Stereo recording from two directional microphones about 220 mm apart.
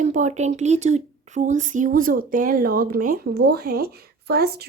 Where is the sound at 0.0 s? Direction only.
35° right (ahead or behind).